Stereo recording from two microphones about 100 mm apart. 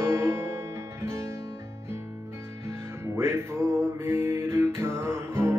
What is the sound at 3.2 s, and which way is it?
Music, 25° right (ahead or behind).